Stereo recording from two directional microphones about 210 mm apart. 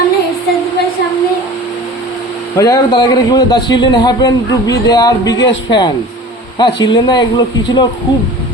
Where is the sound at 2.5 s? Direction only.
15° left (ahead or behind).